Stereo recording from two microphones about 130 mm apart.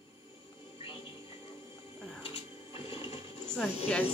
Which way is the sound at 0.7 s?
40° left (ahead or behind).